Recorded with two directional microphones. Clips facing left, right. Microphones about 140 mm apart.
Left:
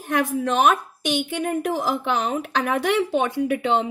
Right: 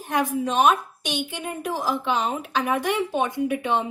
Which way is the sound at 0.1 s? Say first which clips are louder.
Left 2 dB; 60° left (ahead or behind).